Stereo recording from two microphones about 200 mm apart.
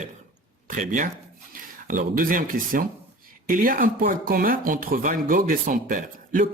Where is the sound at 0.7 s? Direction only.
40° right (ahead or behind).